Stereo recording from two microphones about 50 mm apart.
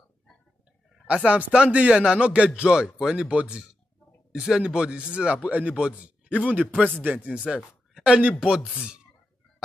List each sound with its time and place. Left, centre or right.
1.0 s a man's voice: right
2.7 s a man's voice: centre
4.3 s a man's voice: centre
4.6 s a man's voice: right
7.5 s a sound: centre
8.6 s a man's voice: centre